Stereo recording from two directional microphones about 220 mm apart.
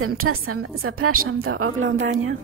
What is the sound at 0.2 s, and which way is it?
A woman's voice, 75° right (ahead or behind).